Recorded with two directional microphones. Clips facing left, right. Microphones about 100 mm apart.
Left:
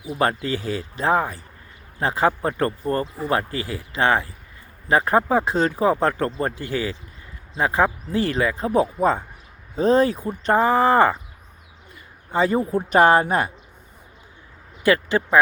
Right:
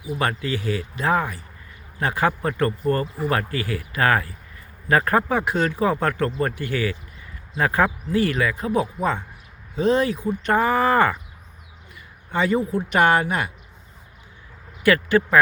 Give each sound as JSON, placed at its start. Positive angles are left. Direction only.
{"t": 0.0, "sound": "speech", "side_deg": 30}
{"t": 12.3, "sound": "speech", "side_deg": 35}
{"t": 14.8, "sound": "speech", "side_deg": 25}